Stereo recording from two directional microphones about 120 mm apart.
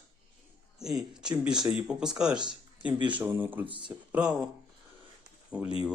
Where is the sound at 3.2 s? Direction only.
15° right (ahead or behind).